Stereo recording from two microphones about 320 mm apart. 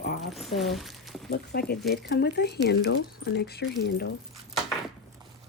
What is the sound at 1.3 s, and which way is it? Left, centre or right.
Speech, left.